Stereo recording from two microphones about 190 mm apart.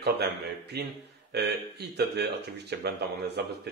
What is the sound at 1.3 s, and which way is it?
Speech, 60° right (ahead or behind).